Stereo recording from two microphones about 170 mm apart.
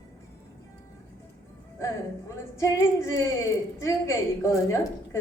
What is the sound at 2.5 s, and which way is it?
A woman's voice, 15° left (ahead or behind).